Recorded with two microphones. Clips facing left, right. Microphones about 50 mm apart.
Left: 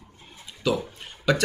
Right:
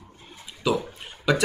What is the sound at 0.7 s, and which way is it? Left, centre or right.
Speech, centre.